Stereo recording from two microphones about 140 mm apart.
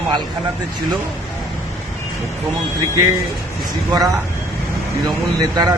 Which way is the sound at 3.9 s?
25° right (ahead or behind).